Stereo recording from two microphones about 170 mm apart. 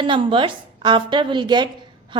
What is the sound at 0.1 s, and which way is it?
A woman's voice, 30° right (ahead or behind).